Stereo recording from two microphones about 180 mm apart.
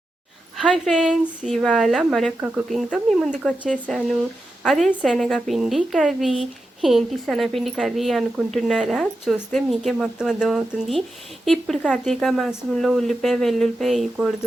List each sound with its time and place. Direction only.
0.5 s a woman's voice: centre (ahead or behind)